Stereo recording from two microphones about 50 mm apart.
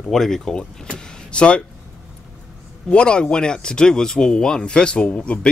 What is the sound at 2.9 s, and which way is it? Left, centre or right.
Speech, left.